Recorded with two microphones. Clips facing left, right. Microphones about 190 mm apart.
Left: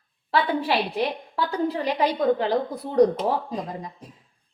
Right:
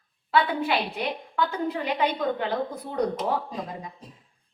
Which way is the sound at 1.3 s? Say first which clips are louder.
Even; 35° left (ahead or behind).